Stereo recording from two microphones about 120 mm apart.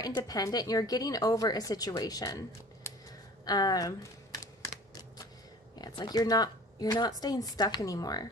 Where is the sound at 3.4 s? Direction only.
30° left (ahead or behind).